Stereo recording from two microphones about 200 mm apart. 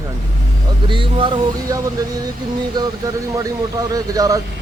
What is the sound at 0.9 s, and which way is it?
Speech, 25° right (ahead or behind).